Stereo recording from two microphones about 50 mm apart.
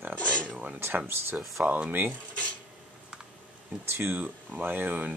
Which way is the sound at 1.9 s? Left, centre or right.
Right.